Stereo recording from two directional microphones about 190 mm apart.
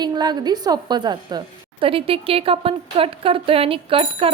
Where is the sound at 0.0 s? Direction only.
20° right (ahead or behind).